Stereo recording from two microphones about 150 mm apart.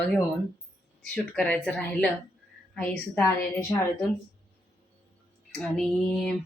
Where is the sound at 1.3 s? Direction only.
10° left (ahead or behind).